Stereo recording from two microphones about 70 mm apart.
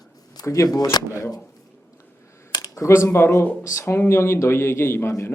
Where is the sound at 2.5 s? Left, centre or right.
Left.